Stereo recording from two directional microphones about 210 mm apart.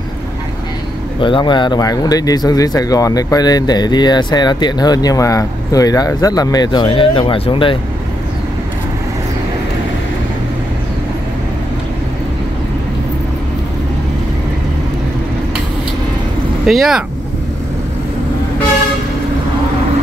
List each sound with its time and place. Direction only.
1.2 s speech: 20° left (ahead or behind)
16.6 s speech: centre (ahead or behind)